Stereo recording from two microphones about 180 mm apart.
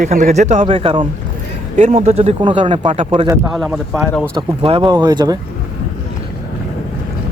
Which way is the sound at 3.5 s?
Centre (ahead or behind).